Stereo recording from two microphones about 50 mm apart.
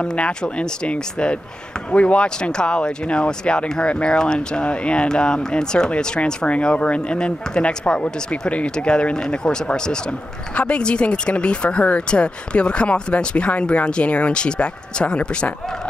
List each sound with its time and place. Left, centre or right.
0.0 s speech: left